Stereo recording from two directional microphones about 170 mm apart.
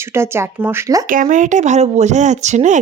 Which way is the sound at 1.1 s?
50° right (ahead or behind).